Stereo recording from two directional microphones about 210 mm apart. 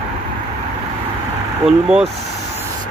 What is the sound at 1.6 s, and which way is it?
Speech, 5° right (ahead or behind).